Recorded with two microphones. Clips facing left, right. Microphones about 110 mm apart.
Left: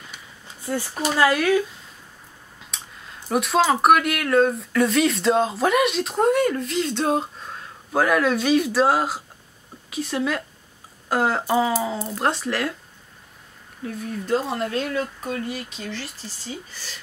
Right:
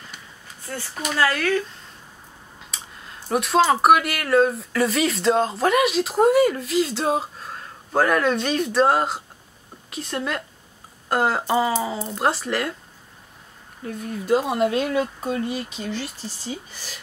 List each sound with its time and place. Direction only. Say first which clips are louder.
0.9 s speech: left 2 dB; 30° left (ahead or behind)
1.2 s speech: left 3 dB; 15° left (ahead or behind)
2.6 s speech: even; centre (ahead or behind)
13.8 s speech: right 3 dB; centre (ahead or behind)